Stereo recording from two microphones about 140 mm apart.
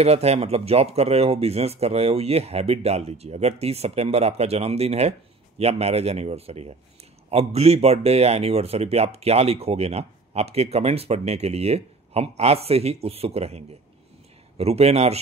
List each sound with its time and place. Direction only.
0.0 s speech: 45° right (ahead or behind)